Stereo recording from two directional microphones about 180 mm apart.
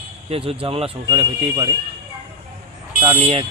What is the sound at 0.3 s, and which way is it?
Speech, 30° right (ahead or behind).